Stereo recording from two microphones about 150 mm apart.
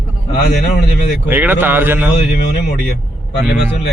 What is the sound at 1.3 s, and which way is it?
Speech, 15° right (ahead or behind).